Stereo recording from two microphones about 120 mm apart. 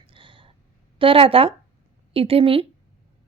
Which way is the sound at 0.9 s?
50° right (ahead or behind).